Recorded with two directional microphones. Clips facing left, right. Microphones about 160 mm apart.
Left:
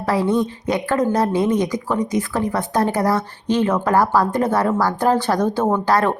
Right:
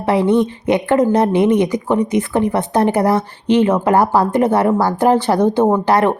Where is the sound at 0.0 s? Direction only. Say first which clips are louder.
Right 4 dB; 20° right (ahead or behind).